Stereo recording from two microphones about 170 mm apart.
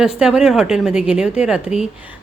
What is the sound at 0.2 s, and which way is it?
A woman's voice, 5° right (ahead or behind).